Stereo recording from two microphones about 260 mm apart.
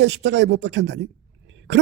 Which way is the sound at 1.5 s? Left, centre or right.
Right.